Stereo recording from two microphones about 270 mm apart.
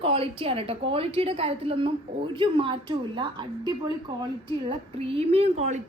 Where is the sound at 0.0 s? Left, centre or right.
Right.